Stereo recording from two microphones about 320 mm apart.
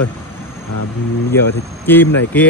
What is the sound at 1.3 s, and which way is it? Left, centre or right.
Speech, centre.